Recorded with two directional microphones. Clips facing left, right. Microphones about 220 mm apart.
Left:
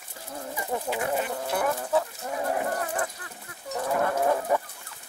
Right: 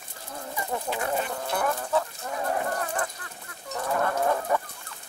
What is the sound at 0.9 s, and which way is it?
Chicken, 15° left (ahead or behind).